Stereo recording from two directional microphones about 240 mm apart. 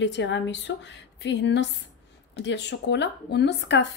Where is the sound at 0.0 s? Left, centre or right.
Left.